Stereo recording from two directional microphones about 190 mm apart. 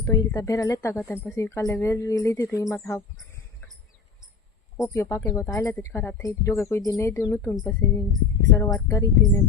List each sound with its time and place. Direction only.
0.0 s speech: 15° left (ahead or behind)
4.9 s speech: 15° left (ahead or behind)